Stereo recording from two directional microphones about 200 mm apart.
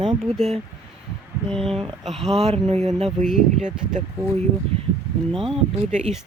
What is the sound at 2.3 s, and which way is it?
Speech, 30° right (ahead or behind).